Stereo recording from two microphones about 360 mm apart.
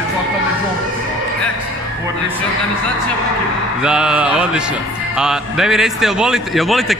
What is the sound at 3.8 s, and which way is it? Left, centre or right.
A man's voice, centre.